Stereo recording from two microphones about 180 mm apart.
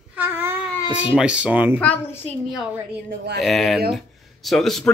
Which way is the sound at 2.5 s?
5° right (ahead or behind).